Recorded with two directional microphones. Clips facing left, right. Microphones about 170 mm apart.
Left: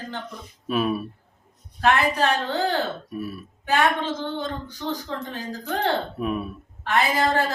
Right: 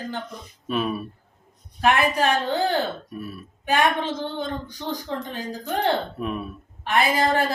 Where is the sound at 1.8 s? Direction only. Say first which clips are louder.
Even; 15° right (ahead or behind).